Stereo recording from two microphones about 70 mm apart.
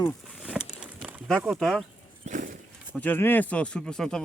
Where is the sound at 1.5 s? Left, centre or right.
Centre.